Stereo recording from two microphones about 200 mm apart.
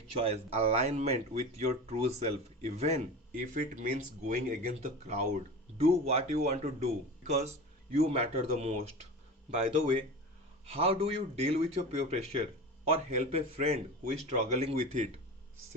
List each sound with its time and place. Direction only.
0.2 s speech: 30° right (ahead or behind)